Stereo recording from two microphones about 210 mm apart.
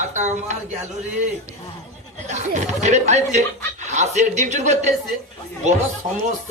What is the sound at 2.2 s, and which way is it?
Speech, 35° right (ahead or behind).